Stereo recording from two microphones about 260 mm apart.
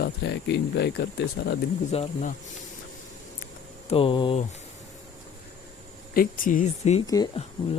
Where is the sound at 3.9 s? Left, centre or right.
Left.